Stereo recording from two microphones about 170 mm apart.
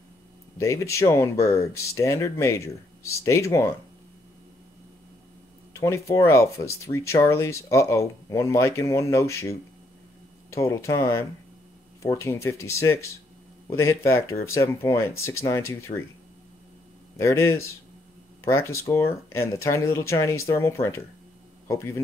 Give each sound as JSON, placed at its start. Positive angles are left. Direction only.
{"t": 0.6, "sound": "speech", "side_deg": 15}
{"t": 5.7, "sound": "speech", "side_deg": 15}
{"t": 17.2, "sound": "speech", "side_deg": 15}